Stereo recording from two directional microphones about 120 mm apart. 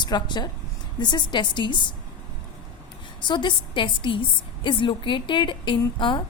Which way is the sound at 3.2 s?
40° left (ahead or behind).